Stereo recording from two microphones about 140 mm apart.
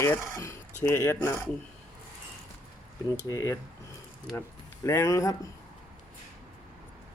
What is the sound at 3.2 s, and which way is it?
Speech, 25° left (ahead or behind).